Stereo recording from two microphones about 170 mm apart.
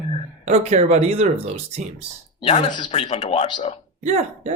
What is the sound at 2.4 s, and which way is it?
Speech, 30° left (ahead or behind).